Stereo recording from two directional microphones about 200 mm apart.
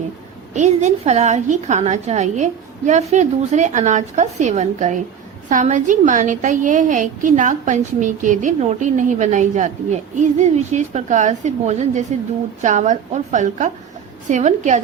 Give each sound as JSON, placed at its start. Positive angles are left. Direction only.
{"t": 0.5, "sound": "a woman's voice", "side_deg": -35}